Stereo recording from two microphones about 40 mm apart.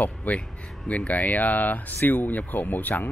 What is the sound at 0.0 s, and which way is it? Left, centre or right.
Speech, left.